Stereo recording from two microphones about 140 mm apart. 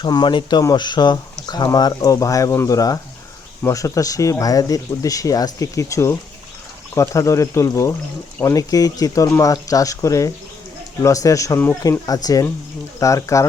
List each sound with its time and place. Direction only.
0.0 s speech: 30° left (ahead or behind)